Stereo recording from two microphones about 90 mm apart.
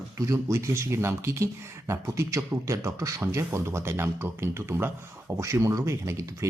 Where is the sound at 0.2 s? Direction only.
40° right (ahead or behind).